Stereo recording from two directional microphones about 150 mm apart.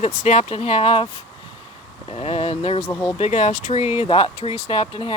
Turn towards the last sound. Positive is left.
turn(degrees=35)  # may be behind; listen again after turning